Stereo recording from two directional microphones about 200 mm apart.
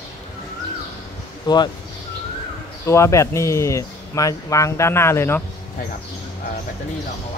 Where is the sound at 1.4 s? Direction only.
20° left (ahead or behind).